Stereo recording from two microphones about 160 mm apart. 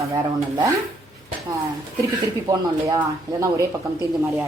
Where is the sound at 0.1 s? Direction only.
20° right (ahead or behind).